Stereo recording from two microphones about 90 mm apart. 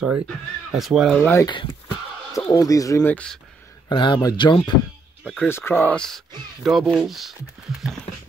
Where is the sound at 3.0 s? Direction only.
20° left (ahead or behind).